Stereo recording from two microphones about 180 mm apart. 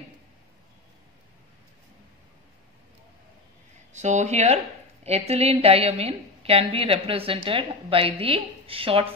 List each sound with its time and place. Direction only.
3.9 s a woman's voice: 40° right (ahead or behind)